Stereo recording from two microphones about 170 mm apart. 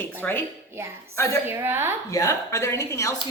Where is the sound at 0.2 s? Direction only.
10° left (ahead or behind).